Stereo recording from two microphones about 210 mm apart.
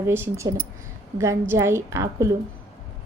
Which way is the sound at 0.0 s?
10° right (ahead or behind).